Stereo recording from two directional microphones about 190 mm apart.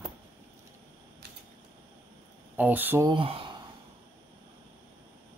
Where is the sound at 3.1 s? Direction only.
30° right (ahead or behind).